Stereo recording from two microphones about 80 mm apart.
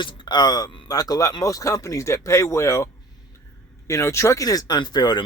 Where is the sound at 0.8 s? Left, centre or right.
Left.